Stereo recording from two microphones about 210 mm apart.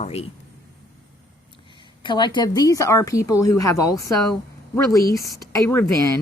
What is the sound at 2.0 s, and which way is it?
Speech, 20° left (ahead or behind).